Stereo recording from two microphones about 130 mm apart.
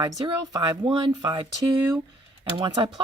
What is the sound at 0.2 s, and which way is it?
Speech, 30° right (ahead or behind).